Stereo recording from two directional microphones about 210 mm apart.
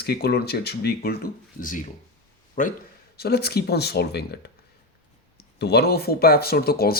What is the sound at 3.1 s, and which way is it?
Speech, 50° left (ahead or behind).